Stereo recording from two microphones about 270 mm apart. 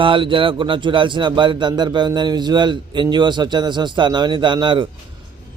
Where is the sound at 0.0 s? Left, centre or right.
Centre.